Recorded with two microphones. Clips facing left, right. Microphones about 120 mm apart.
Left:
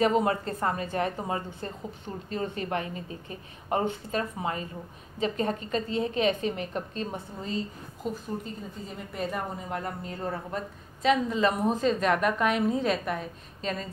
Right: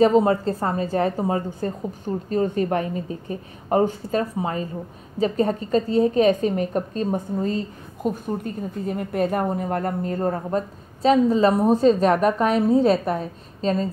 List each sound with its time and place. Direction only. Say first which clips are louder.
0.0 s a woman's voice: right 8 dB; 30° right (ahead or behind)
8.0 s a woman's voice: right 8 dB; 55° right (ahead or behind); by 13.9 s 35° right (ahead or behind)